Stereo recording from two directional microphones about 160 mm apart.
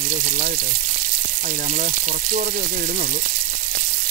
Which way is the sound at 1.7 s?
55° right (ahead or behind).